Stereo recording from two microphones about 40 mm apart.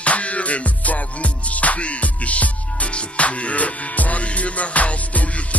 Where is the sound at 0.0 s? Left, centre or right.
Left.